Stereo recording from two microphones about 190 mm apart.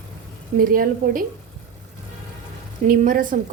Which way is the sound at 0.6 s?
45° right (ahead or behind).